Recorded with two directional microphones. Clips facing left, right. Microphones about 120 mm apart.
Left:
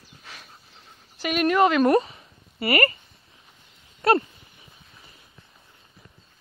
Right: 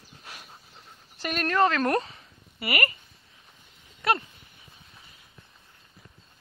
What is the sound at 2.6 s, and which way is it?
Speech, 35° left (ahead or behind).